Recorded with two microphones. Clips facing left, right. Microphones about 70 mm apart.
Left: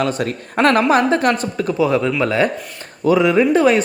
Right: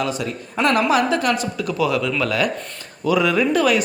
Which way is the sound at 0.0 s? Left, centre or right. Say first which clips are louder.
Left 4 dB; left.